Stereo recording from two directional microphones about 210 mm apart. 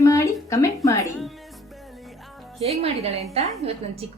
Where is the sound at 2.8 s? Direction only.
30° right (ahead or behind).